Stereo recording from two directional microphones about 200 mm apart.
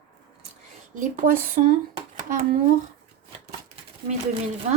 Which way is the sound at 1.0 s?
40° right (ahead or behind).